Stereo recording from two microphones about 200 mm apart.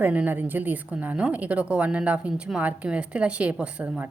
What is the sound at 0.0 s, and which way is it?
A woman's voice, 10° right (ahead or behind).